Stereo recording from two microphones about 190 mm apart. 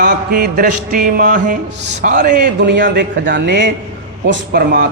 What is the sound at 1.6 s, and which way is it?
Speech, 65° right (ahead or behind).